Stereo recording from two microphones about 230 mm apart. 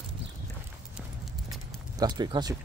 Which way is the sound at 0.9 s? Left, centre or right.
Centre.